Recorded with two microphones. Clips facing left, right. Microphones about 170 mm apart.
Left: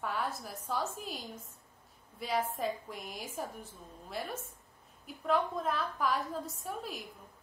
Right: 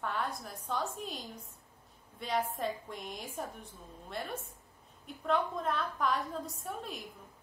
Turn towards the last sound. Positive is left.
turn(degrees=0)  # may be behind; listen again after turning